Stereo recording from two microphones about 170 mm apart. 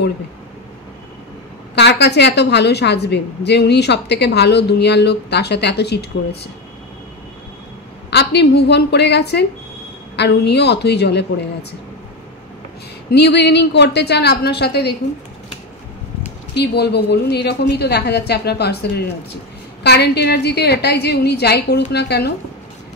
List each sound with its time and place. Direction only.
1.8 s a woman's voice: 80° left
8.1 s a woman's voice: 75° left (ahead or behind)
13.1 s a woman's voice: 80° left
16.5 s a woman's voice: 75° left (ahead or behind)